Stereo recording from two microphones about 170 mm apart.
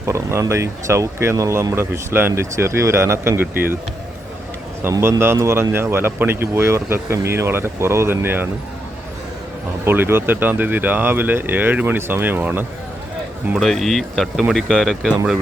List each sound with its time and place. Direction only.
0.0 s speech: 15° right (ahead or behind)
4.8 s speech: 15° right (ahead or behind)
9.8 s speech: 10° right (ahead or behind)
13.6 s speech: centre (ahead or behind)